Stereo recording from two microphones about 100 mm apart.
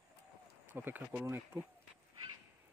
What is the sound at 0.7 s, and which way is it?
Speech, 20° right (ahead or behind).